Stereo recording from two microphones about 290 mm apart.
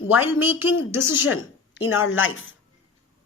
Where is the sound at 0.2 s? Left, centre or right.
Centre.